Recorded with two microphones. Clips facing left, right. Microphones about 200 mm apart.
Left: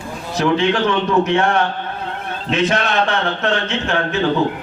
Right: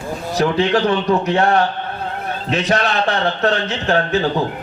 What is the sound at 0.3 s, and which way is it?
A man's voice, 35° right (ahead or behind).